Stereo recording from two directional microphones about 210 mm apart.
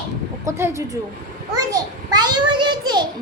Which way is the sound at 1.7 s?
20° right (ahead or behind).